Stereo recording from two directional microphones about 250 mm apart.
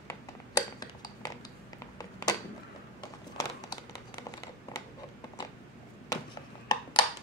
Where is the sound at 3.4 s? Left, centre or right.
Centre.